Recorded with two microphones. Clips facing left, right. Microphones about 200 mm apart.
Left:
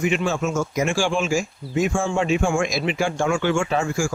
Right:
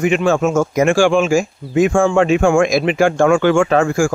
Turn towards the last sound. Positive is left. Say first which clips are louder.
# right 8 dB
turn(degrees=-55)  # may be behind; listen again after turning